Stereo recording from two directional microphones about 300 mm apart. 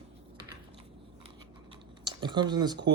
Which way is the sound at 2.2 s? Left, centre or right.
Centre.